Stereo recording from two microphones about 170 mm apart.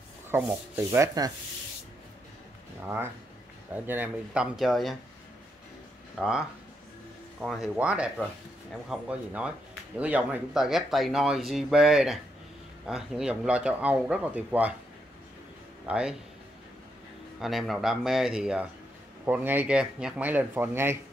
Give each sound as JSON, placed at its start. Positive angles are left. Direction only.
{"t": 0.3, "sound": "speech", "side_deg": -10}
{"t": 3.7, "sound": "speech", "side_deg": -10}
{"t": 6.1, "sound": "speech", "side_deg": 0}
{"t": 15.8, "sound": "speech", "side_deg": -5}
{"t": 17.4, "sound": "speech", "side_deg": 0}